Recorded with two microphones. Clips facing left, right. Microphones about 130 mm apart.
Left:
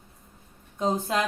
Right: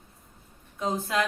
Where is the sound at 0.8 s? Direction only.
30° left (ahead or behind).